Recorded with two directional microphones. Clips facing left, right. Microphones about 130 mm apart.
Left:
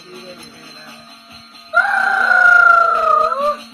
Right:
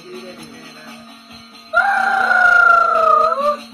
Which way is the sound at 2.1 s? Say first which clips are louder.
Right 1 dB; 10° right (ahead or behind).